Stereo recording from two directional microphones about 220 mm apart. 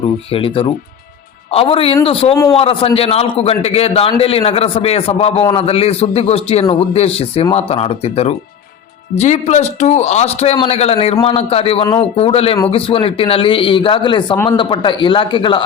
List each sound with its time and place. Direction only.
0.3 s a man's voice: 25° left (ahead or behind)